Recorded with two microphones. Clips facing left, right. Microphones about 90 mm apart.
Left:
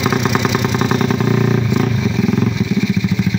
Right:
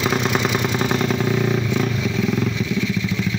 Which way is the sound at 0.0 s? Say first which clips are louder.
Left 4 dB; 20° left (ahead or behind).